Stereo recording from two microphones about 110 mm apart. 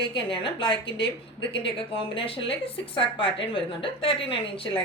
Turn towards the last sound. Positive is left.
turn(degrees=55)  # may be behind; listen again after turning